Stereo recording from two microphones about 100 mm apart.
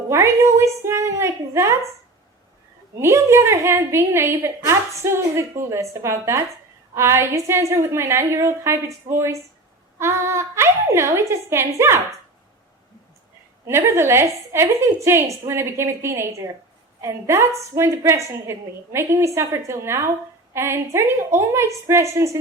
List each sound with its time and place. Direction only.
0.1 s a woman's voice: 25° right (ahead or behind)
3.0 s a woman's voice: 30° right (ahead or behind)
13.7 s a woman's voice: 25° right (ahead or behind)